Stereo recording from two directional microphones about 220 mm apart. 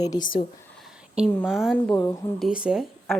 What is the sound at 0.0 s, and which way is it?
Speech, 20° left (ahead or behind).